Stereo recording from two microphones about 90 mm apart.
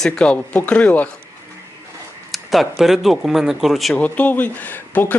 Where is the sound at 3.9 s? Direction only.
15° left (ahead or behind).